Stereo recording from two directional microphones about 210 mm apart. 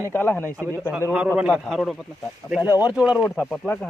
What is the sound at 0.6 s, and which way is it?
Speech, 15° right (ahead or behind).